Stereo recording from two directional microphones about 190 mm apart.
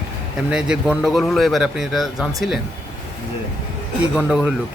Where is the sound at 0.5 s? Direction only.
5° right (ahead or behind).